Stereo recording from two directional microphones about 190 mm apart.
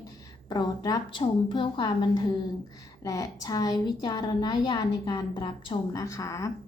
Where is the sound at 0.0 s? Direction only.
20° left (ahead or behind).